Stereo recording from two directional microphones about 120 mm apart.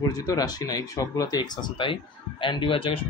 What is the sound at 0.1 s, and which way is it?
Speech, 30° left (ahead or behind).